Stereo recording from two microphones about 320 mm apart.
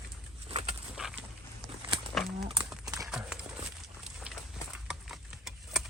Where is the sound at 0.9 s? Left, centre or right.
Centre.